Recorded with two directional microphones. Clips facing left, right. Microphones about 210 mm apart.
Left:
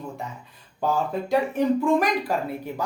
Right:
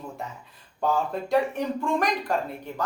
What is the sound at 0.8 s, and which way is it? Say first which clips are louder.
A woman's voice: left 1 dB; centre (ahead or behind).